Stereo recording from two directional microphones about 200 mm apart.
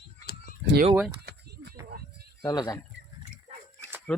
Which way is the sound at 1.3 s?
55° right (ahead or behind).